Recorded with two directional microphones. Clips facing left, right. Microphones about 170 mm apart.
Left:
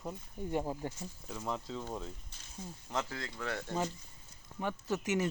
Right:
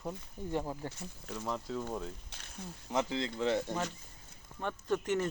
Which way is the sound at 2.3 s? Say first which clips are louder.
Right 1 dB; 70° right (ahead or behind).